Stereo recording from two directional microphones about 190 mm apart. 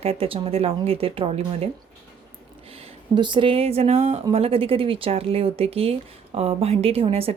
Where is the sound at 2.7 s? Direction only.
30° right (ahead or behind).